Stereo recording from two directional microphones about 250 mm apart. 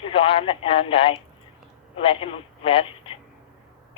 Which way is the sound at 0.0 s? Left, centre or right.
Left.